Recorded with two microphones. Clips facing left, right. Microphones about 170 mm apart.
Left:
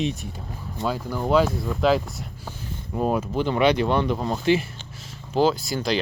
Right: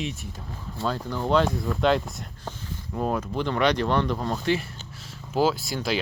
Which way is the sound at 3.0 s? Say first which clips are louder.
Left 3 dB; 15° left (ahead or behind).